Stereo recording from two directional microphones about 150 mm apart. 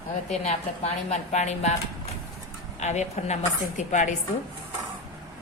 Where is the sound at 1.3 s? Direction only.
50° left (ahead or behind).